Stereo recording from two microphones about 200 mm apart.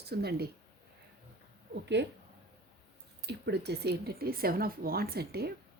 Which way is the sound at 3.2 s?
55° right (ahead or behind).